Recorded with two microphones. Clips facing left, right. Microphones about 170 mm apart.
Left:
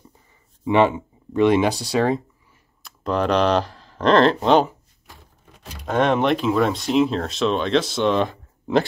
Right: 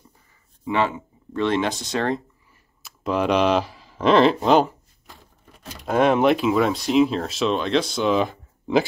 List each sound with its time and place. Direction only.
0.7 s speech: 20° left (ahead or behind); by 4.7 s centre (ahead or behind)
5.9 s speech: 5° right (ahead or behind)